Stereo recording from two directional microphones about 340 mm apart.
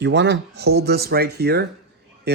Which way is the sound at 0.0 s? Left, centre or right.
Right.